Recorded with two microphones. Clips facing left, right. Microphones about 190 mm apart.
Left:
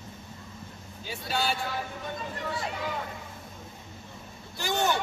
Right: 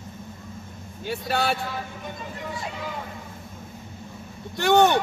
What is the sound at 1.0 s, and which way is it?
Speech, 60° right (ahead or behind).